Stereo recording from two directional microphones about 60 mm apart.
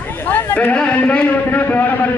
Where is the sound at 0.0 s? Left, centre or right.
Left.